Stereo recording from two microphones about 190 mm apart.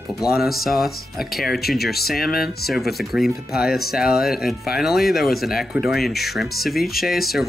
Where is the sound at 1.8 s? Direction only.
55° left (ahead or behind).